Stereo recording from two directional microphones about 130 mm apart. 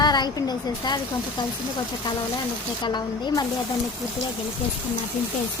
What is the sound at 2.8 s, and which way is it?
Speech, 35° left (ahead or behind).